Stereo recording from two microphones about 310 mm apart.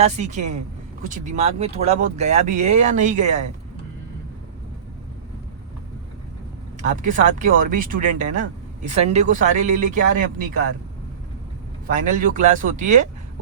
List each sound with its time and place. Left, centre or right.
0.0 s speech: right
6.9 s speech: right
11.9 s speech: right